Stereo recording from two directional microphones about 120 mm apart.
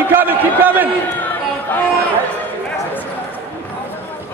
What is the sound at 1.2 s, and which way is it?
Chatter, 15° left (ahead or behind).